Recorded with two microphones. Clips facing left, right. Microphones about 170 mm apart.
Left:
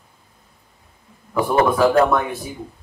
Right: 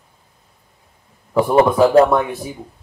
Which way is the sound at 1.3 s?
25° right (ahead or behind).